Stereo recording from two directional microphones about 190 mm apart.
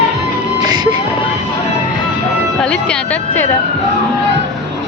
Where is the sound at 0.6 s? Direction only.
20° right (ahead or behind).